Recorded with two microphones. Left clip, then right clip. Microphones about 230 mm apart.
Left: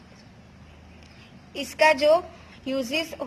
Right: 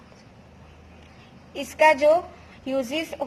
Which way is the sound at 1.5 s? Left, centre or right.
Centre.